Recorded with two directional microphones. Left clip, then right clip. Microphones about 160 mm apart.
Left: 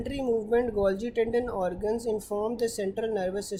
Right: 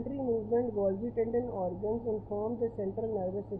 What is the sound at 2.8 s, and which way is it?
Speech, 35° left (ahead or behind).